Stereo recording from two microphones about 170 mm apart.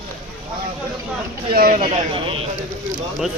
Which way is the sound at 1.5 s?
55° right (ahead or behind).